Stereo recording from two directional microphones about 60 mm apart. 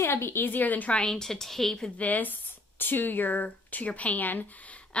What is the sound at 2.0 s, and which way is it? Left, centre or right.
A woman's voice, left.